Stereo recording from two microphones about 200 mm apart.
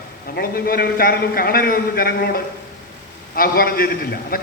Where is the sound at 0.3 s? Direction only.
50° left (ahead or behind).